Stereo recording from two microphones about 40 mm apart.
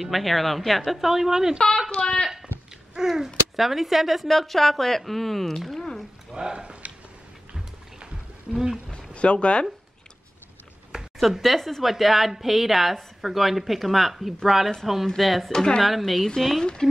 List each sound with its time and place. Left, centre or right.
0.0 s a woman's voice: centre
1.9 s speech: left
3.0 s speech: centre
3.5 s a woman's voice: centre
6.3 s a sound: right
8.5 s a woman's voice: centre
8.9 s a sound: left
10.9 s a sound: centre
11.4 s a woman's voice: centre
15.5 s speech: centre
15.8 s a woman's voice: centre